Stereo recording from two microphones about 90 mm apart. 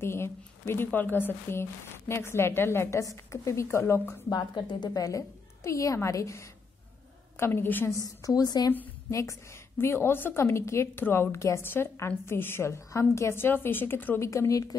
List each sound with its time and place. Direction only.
0.0 s a woman's voice: 30° left (ahead or behind)
4.6 s a woman's voice: 55° left (ahead or behind); by 7.9 s 25° left (ahead or behind)
8.0 s a woman's voice: 40° left (ahead or behind)